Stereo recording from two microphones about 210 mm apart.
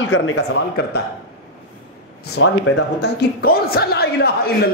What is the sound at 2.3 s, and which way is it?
A man's voice, 55° left (ahead or behind).